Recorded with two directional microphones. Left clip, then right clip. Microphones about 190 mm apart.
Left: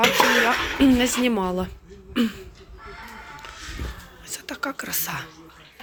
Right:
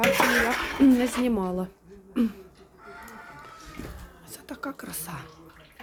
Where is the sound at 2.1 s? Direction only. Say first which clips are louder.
Left 3 dB; centre (ahead or behind).